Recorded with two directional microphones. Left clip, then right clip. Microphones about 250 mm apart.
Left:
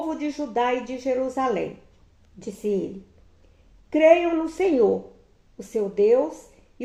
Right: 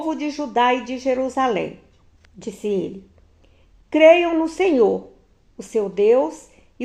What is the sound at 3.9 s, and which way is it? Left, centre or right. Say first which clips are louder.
A woman's voice: right 4 dB; centre.